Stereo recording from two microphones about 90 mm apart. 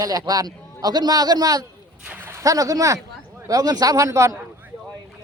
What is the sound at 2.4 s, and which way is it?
A man's voice, 40° right (ahead or behind).